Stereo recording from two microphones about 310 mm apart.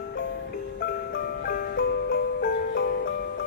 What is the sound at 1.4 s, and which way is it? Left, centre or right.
Music, left.